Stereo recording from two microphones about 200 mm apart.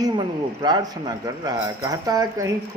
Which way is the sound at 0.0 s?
20° right (ahead or behind).